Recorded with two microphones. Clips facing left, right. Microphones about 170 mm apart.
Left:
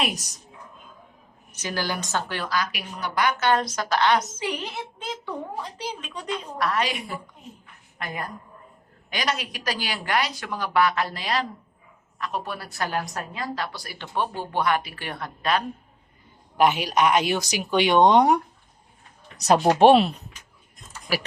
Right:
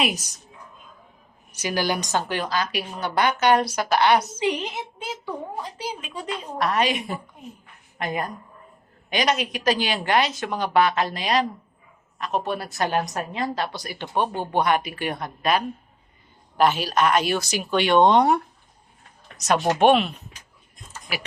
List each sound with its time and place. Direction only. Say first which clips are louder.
0.0 s speech: right 3 dB; centre (ahead or behind)
1.5 s a woman's voice: right 4 dB; 15° right (ahead or behind)
3.4 s a woman's voice: right 3 dB; 10° right (ahead or behind)
6.6 s a woman's voice: right 4 dB; 20° right (ahead or behind)
16.6 s speech: even; 15° left (ahead or behind)
19.4 s speech: left 3 dB; 35° left (ahead or behind)